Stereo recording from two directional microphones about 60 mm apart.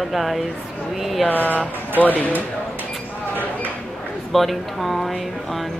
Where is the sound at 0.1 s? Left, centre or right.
Centre.